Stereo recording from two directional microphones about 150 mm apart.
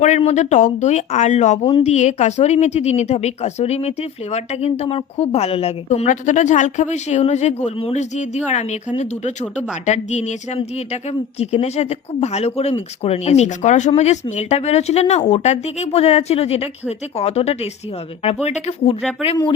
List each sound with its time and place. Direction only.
0.0 s a woman's voice: 50° left (ahead or behind)
6.1 s a woman's voice: 55° left (ahead or behind)